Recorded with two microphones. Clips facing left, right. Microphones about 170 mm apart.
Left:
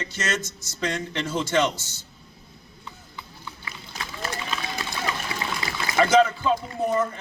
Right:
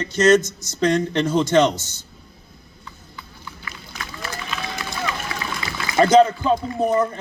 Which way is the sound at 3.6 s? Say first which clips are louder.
Right 1 dB; 25° left (ahead or behind).